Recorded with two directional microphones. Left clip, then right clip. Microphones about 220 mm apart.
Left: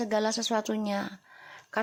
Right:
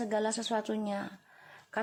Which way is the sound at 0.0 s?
15° left (ahead or behind).